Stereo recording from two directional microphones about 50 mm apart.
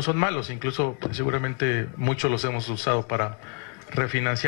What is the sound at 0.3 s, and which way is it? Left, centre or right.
Speech, centre.